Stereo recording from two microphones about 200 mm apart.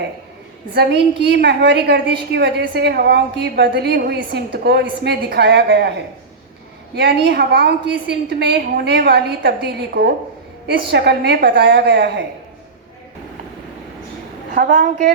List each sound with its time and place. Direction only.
0.7 s a woman's voice: 55° right (ahead or behind)
6.9 s a woman's voice: 55° right (ahead or behind)
14.5 s a woman's voice: 45° right (ahead or behind)